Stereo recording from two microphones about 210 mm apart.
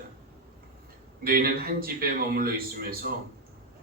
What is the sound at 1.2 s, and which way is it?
A man's voice, 45° right (ahead or behind).